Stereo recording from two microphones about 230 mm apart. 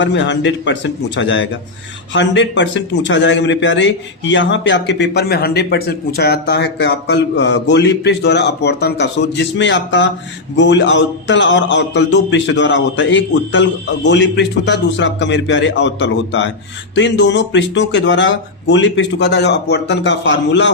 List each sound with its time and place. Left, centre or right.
0.0 s a man's voice: left